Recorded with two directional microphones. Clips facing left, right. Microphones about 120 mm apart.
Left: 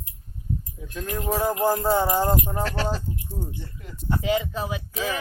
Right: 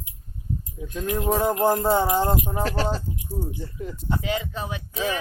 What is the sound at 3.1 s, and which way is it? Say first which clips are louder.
Speech: right 3 dB; 15° right (ahead or behind).